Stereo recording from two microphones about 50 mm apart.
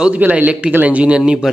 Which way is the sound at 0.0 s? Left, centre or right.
Right.